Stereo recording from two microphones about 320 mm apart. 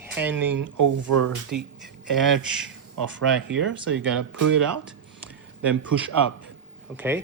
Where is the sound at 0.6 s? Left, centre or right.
Right.